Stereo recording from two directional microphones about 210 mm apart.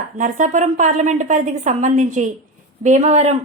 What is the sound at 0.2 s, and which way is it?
Speech, 35° right (ahead or behind).